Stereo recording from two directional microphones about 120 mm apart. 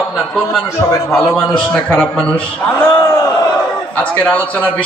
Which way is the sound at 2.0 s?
5° left (ahead or behind).